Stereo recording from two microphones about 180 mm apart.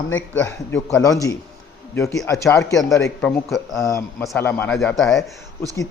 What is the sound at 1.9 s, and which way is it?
Speech, 15° left (ahead or behind).